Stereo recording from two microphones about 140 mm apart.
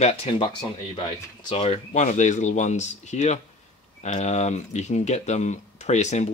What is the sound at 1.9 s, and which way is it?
Speech, 60° left (ahead or behind).